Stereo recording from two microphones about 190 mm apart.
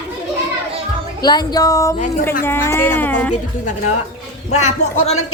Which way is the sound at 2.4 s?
15° left (ahead or behind).